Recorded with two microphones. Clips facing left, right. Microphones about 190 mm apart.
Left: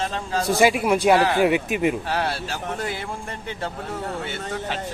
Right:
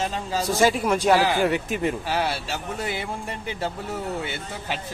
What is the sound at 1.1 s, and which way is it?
Speech, centre (ahead or behind).